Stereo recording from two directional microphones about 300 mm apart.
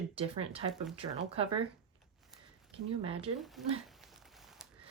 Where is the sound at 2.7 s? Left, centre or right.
Centre.